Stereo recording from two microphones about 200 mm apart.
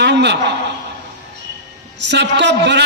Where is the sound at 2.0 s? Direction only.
60° right (ahead or behind).